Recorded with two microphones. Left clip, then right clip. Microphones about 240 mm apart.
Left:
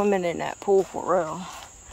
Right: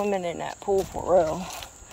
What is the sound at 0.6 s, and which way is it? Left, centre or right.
Speech, left.